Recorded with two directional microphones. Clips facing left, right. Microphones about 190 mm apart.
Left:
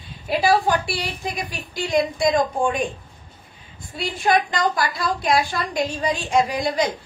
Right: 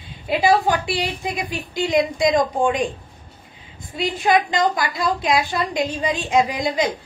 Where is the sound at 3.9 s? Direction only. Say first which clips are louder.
Right 2 dB; 15° right (ahead or behind).